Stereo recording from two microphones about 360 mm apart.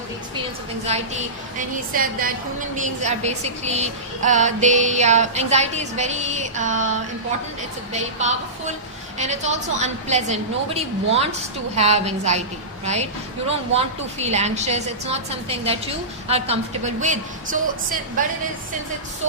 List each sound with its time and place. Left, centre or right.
0.9 s a woman's voice: centre
8.2 s a woman's voice: centre